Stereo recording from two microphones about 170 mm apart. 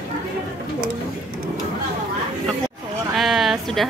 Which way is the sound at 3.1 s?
Centre (ahead or behind).